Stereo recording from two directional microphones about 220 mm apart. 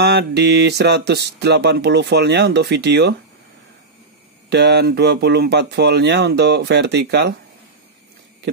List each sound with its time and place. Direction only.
0.0 s speech: 50° right (ahead or behind)
4.5 s speech: 50° right (ahead or behind)